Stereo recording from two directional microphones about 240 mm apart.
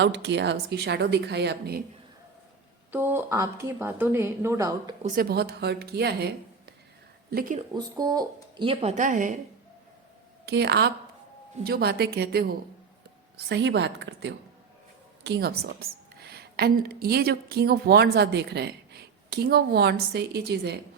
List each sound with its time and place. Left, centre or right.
0.0 s a woman's voice: right
2.9 s a woman's voice: centre
5.0 s speech: right
7.7 s speech: centre; by 9.4 s right
10.4 s a woman's voice: right